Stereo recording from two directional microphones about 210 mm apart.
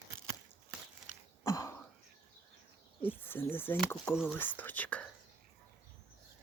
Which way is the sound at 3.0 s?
10° left (ahead or behind).